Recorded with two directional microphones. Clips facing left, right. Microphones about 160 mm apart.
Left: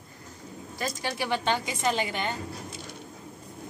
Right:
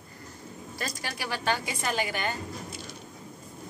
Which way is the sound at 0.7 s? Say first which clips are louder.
Left 5 dB; 20° left (ahead or behind).